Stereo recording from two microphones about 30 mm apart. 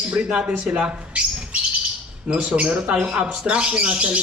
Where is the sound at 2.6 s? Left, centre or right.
Right.